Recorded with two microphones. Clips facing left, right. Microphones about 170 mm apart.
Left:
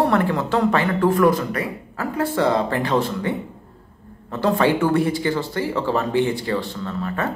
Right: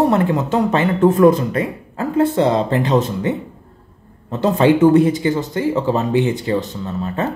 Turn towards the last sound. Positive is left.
turn(degrees=-25)  # may be behind; listen again after turning